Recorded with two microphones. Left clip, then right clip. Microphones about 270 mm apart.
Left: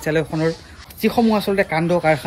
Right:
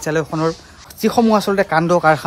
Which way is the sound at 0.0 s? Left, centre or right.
Centre.